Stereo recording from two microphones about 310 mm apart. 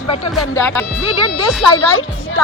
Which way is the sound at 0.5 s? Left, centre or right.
Centre.